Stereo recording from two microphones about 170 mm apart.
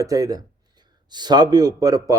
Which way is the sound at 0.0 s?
20° right (ahead or behind).